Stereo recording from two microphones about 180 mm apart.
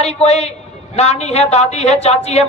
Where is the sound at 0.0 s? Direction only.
35° left (ahead or behind).